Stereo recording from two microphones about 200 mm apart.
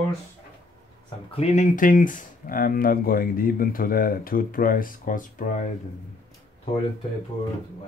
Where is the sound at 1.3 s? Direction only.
35° left (ahead or behind).